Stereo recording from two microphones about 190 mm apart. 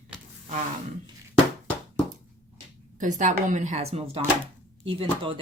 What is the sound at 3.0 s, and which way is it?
Speech, 40° right (ahead or behind).